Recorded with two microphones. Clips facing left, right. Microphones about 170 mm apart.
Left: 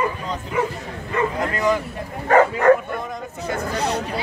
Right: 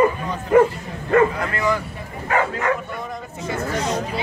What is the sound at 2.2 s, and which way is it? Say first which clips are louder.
Bow-wow: left 7 dB; 45° left (ahead or behind).